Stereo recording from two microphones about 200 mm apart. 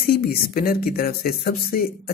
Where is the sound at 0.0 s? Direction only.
50° left (ahead or behind).